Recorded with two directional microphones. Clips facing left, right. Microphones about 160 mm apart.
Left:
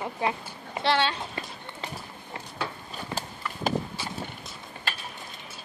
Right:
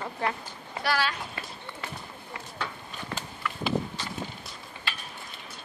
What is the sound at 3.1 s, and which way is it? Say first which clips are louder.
Horse: right 1 dB; 35° left (ahead or behind).